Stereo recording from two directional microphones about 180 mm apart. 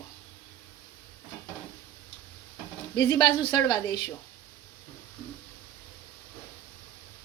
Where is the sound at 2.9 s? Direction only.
25° left (ahead or behind).